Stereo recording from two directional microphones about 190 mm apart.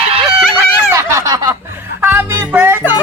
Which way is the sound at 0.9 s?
15° right (ahead or behind).